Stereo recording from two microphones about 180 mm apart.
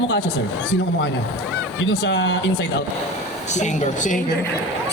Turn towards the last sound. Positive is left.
turn(degrees=45)  # may be behind; listen again after turning